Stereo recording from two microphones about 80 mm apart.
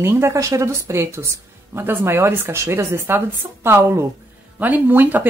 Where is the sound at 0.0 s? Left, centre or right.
Right.